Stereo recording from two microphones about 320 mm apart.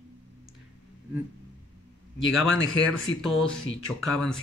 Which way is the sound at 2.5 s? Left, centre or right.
Left.